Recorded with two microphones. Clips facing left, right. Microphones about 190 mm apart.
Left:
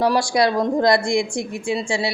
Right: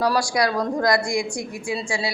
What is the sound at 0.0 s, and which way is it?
Speech, 25° left (ahead or behind).